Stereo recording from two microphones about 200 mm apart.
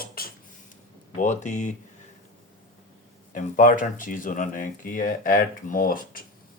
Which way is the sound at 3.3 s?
40° left (ahead or behind).